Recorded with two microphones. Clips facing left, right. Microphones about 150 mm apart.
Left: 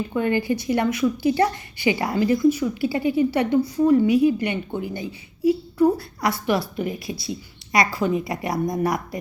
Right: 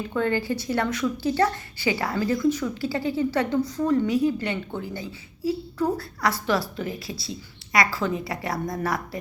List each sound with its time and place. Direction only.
0.1 s a woman's voice: 15° left (ahead or behind)